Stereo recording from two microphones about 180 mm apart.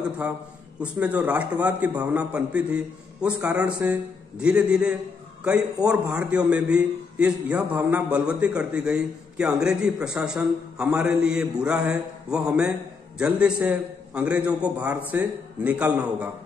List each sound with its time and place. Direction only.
0.7 s a man's voice: 5° right (ahead or behind)